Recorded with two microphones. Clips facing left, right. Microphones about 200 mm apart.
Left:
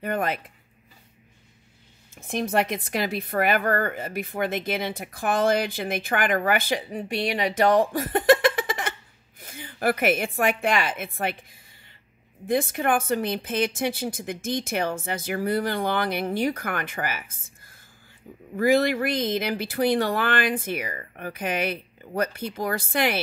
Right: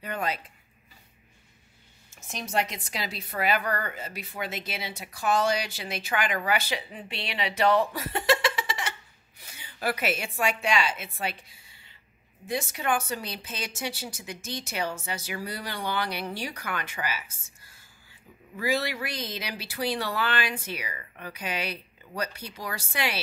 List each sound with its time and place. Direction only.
0.0 s a woman's voice: 55° left (ahead or behind)
2.1 s a woman's voice: 55° left (ahead or behind)